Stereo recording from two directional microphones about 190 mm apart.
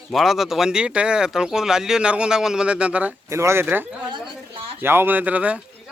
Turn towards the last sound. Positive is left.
turn(degrees=-5)  # may be behind; listen again after turning